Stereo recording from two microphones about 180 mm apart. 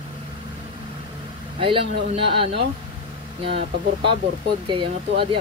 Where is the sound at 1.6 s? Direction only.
30° right (ahead or behind).